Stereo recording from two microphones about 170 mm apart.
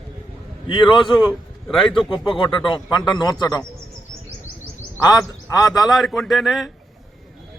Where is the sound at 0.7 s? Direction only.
30° left (ahead or behind).